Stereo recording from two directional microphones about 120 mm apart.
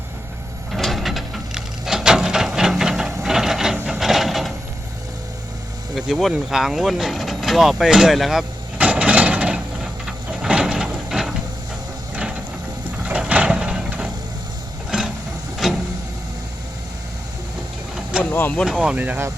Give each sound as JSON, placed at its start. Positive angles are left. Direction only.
{"t": 0.7, "sound": "wood", "side_deg": 0}
{"t": 6.1, "sound": "vehicle", "side_deg": -5}
{"t": 12.1, "sound": "ratchet", "side_deg": -10}
{"t": 13.1, "sound": "printer", "side_deg": -10}
{"t": 14.8, "sound": "a sound", "side_deg": -5}
{"t": 18.2, "sound": "vehicle", "side_deg": 15}
{"t": 18.6, "sound": "speech", "side_deg": -5}